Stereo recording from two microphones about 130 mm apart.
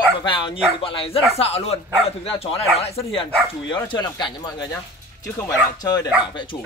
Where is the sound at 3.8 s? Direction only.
30° left (ahead or behind).